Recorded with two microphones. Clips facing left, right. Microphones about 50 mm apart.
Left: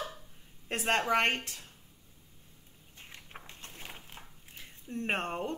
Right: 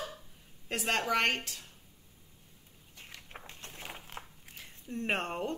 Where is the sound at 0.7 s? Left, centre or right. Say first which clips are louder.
Left 2 dB; left.